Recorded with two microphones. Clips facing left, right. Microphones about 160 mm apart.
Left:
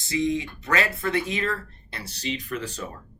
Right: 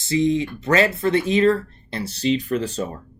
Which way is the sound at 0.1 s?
30° right (ahead or behind).